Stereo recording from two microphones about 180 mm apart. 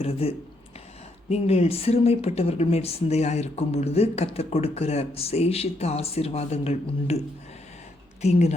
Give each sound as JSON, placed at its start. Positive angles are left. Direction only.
{"t": 0.0, "sound": "speech", "side_deg": 35}
{"t": 8.2, "sound": "speech", "side_deg": 40}